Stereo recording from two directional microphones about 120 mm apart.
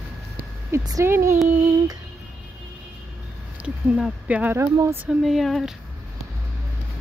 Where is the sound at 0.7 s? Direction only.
25° right (ahead or behind).